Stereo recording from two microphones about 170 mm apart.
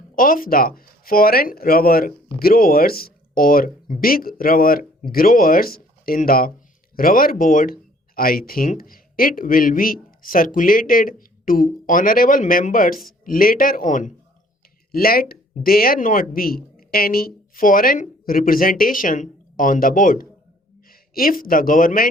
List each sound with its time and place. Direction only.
0.2 s speech: 55° left (ahead or behind)
14.9 s speech: 60° left (ahead or behind)